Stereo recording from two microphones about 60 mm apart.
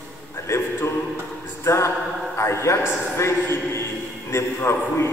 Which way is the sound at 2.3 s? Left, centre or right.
Left.